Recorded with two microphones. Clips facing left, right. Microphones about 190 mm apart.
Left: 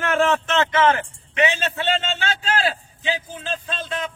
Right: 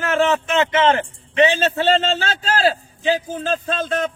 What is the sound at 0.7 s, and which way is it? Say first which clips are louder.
A man's voice: right 2 dB; 25° right (ahead or behind).